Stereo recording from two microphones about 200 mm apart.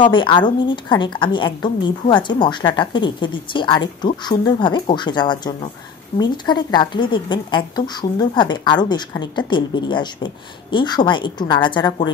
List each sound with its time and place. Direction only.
0.0 s a woman's voice: 25° left (ahead or behind)